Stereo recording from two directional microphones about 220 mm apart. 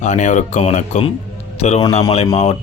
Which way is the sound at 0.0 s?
35° left (ahead or behind).